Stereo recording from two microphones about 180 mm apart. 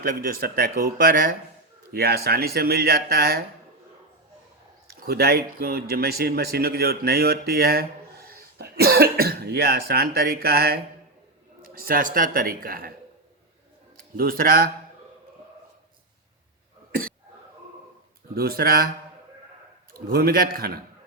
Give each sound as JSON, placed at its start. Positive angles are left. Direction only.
{"t": 0.0, "sound": "speech", "side_deg": -55}
{"t": 1.9, "sound": "speech", "side_deg": -60}
{"t": 4.9, "sound": "speech", "side_deg": -60}
{"t": 14.2, "sound": "speech", "side_deg": -55}
{"t": 18.3, "sound": "speech", "side_deg": -55}
{"t": 19.9, "sound": "speech", "side_deg": -55}